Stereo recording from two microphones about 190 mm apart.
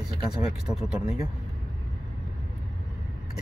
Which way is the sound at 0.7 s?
5° right (ahead or behind).